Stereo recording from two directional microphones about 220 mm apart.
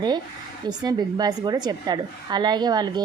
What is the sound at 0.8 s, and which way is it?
A woman's voice, 20° right (ahead or behind).